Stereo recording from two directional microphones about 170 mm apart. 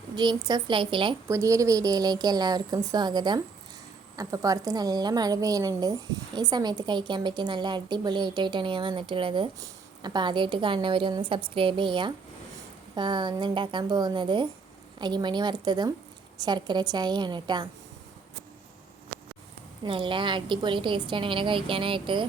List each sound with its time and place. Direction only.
0.2 s a woman's voice: 25° right (ahead or behind)
1.3 s a woman's voice: 20° right (ahead or behind)
19.8 s a woman's voice: 30° right (ahead or behind)